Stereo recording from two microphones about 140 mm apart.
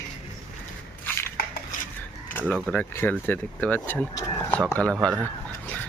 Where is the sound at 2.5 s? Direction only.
10° left (ahead or behind).